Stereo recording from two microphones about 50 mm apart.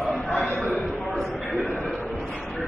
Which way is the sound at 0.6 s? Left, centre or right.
Centre.